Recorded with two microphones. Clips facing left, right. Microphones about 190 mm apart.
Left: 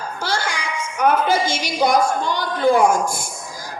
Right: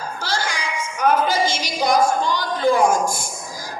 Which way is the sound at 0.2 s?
55° left (ahead or behind).